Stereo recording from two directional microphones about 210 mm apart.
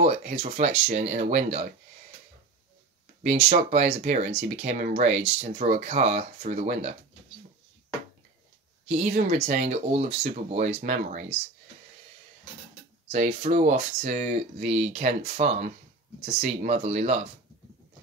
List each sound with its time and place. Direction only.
0.0 s speech: 35° right (ahead or behind)
3.3 s speech: 30° right (ahead or behind)
9.0 s speech: 35° right (ahead or behind)
13.1 s speech: 30° right (ahead or behind)